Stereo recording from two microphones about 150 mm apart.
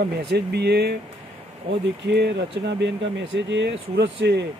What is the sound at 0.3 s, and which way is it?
Speech, 90° right.